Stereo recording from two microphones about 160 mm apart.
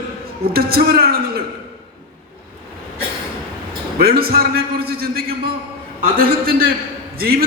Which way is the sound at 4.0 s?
70° right (ahead or behind).